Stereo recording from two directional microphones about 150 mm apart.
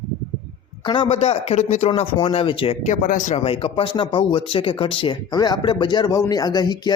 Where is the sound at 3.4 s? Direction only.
35° left (ahead or behind).